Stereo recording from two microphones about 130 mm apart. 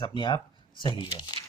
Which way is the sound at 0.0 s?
35° left (ahead or behind).